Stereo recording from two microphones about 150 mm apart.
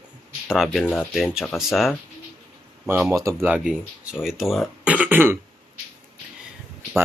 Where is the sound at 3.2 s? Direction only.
20° right (ahead or behind).